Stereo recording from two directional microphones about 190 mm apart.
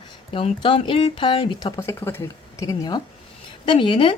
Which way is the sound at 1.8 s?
15° left (ahead or behind).